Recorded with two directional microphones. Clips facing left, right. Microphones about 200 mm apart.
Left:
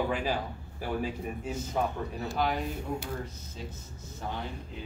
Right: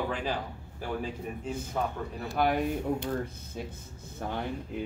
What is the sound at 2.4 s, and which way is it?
Speech, 55° right (ahead or behind).